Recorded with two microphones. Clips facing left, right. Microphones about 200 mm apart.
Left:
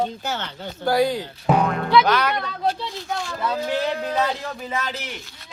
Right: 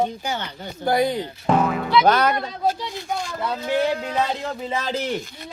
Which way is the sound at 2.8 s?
15° right (ahead or behind).